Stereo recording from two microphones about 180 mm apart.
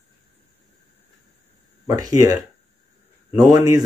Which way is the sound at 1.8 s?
20° right (ahead or behind).